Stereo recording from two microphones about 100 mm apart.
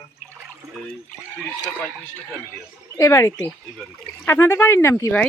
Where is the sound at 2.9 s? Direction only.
30° left (ahead or behind).